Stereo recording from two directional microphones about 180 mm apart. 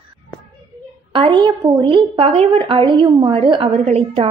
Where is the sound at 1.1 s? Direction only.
25° right (ahead or behind).